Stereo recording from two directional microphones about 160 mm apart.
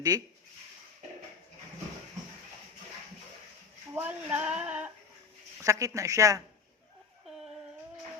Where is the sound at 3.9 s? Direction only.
10° right (ahead or behind).